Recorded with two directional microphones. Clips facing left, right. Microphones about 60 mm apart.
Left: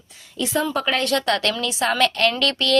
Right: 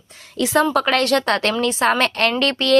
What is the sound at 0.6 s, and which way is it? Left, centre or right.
Speech, right.